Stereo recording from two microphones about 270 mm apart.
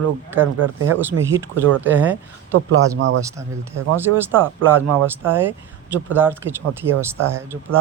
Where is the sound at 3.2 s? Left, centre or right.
Centre.